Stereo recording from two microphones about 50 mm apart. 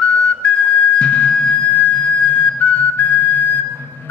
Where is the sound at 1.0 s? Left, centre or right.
Left.